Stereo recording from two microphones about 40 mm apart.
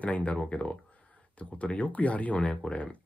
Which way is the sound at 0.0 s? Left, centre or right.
Left.